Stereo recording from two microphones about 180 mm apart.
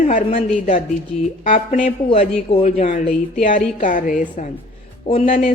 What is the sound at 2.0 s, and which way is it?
Speech, 35° left (ahead or behind).